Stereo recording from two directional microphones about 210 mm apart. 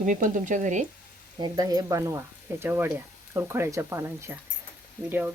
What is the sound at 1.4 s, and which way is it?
Speech, 15° right (ahead or behind).